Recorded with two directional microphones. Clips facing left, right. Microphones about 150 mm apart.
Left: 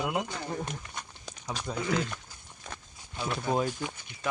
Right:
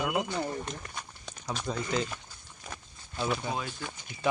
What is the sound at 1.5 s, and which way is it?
Speech, centre (ahead or behind).